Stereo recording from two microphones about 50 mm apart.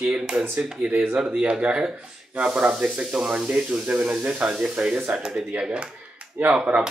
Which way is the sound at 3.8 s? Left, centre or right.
Right.